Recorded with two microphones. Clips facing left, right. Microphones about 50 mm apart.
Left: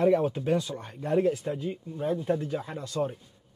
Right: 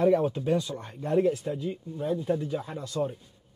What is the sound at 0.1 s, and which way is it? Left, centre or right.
Speech, centre.